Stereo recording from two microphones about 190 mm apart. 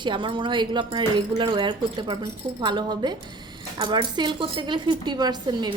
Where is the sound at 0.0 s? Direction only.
25° right (ahead or behind).